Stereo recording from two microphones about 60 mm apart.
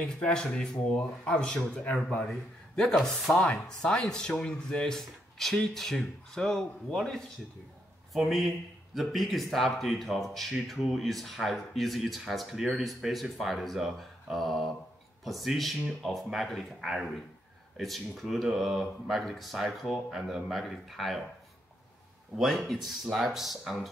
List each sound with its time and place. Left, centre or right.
0.2 s speech: centre
2.8 s speech: centre
22.3 s speech: centre